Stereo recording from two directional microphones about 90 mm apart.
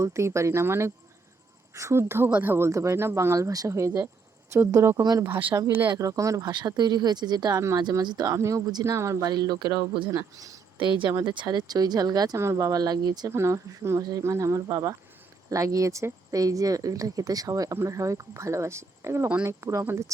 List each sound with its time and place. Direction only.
0.0 s a woman's voice: 35° right (ahead or behind)
6.0 s speech: 35° right (ahead or behind)
6.5 s speech: 55° right (ahead or behind)
8.3 s speech: 35° right (ahead or behind)
11.1 s speech: 55° right (ahead or behind)
12.4 s speech: 35° right (ahead or behind)
13.3 s speech: 35° right (ahead or behind)
14.7 s speech: 50° right (ahead or behind)
15.4 s a woman's voice: 40° right (ahead or behind)